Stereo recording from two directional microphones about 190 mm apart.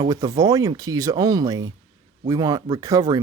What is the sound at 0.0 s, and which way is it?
Speech, 20° right (ahead or behind).